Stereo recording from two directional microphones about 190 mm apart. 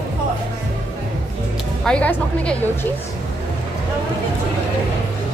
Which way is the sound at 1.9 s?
5° left (ahead or behind).